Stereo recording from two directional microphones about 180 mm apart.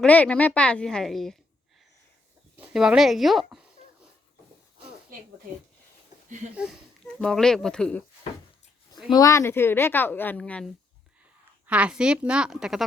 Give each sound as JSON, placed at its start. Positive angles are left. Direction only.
{"t": 0.0, "sound": "speech", "side_deg": 5}
{"t": 2.6, "sound": "speech", "side_deg": -5}
{"t": 5.1, "sound": "speech", "side_deg": -50}
{"t": 6.5, "sound": "speech", "side_deg": -5}
{"t": 9.1, "sound": "a woman's voice", "side_deg": 15}
{"t": 11.6, "sound": "speech", "side_deg": -5}